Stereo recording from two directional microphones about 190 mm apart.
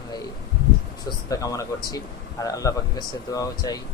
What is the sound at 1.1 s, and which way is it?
Speech, 20° left (ahead or behind).